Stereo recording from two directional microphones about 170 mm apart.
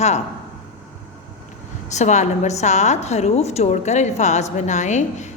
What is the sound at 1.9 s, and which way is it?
A woman's voice, 45° left (ahead or behind).